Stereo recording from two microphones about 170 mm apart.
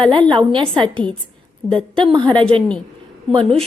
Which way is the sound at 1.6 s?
5° left (ahead or behind).